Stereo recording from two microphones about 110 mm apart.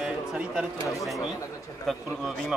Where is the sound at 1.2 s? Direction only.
30° left (ahead or behind).